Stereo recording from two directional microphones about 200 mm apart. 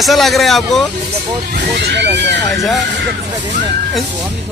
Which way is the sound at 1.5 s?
55° right (ahead or behind).